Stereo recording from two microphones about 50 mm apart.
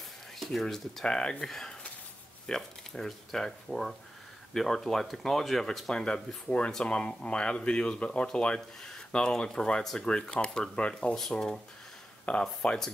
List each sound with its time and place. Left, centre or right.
0.4 s speech: centre
1.0 s speech: centre
11.1 s speech: centre
12.3 s speech: left